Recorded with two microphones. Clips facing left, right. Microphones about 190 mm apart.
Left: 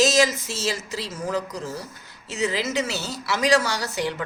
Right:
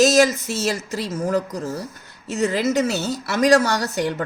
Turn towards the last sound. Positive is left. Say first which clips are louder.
# right 5 dB
turn(degrees=-55)  # may be behind; listen again after turning